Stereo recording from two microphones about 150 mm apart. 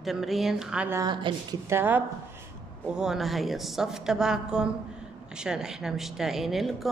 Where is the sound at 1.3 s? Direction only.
35° right (ahead or behind).